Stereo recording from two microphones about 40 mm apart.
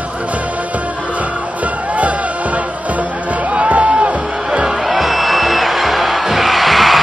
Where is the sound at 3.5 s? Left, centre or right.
Right.